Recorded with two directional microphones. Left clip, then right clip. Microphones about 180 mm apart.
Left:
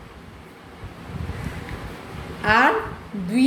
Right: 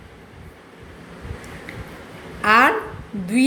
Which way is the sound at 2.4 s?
30° right (ahead or behind).